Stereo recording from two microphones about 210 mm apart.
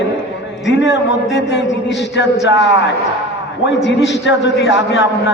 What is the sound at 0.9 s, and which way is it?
Speech, 60° left (ahead or behind).